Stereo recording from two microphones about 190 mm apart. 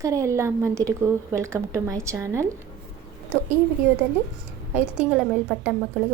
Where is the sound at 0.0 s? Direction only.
15° right (ahead or behind).